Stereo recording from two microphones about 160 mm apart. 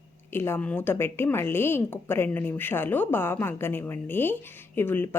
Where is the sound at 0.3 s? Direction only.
15° left (ahead or behind).